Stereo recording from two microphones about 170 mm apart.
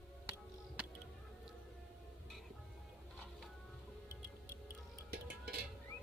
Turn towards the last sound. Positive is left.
turn(degrees=-60)  # may be behind; listen again after turning